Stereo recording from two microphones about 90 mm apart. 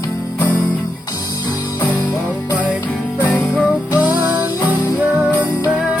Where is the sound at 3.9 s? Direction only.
15° right (ahead or behind).